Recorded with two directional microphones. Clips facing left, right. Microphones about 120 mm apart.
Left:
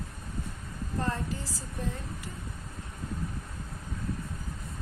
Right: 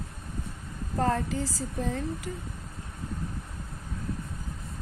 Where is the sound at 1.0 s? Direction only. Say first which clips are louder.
Right 6 dB; 90° right.